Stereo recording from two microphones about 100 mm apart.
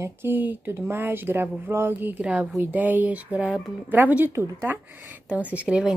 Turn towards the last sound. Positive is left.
turn(degrees=-10)  # may be behind; listen again after turning